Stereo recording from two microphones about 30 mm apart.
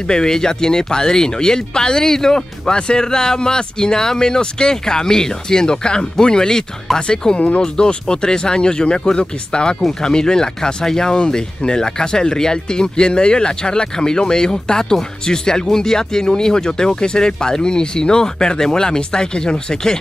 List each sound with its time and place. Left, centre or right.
0.1 s speech: left